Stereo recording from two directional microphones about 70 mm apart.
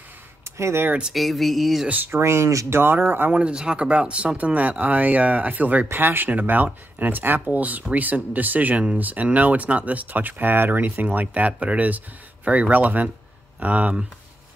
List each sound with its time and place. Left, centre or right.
0.6 s speech: right
1.1 s speech: centre
1.9 s speech: right
2.1 s speech: right
2.8 s speech: right
3.3 s speech: centre